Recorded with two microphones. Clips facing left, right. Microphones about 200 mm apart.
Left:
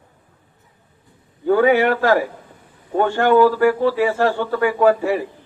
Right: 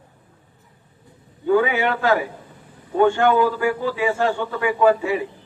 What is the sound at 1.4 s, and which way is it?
A man's voice, 45° left (ahead or behind).